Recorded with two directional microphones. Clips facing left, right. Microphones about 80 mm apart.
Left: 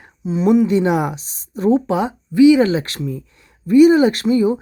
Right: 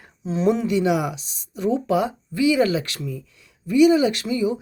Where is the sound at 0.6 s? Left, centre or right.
Left.